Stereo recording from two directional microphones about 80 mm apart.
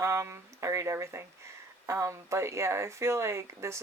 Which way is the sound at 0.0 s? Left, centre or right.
Right.